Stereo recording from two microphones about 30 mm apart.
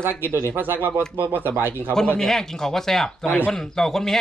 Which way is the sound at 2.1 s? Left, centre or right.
Centre.